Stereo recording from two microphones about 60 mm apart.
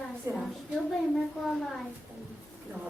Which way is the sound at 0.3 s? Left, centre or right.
Right.